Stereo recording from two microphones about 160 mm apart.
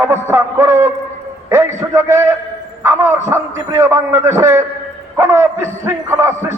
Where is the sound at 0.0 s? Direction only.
15° right (ahead or behind).